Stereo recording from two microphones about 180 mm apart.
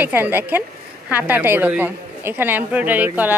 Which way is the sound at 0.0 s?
10° right (ahead or behind).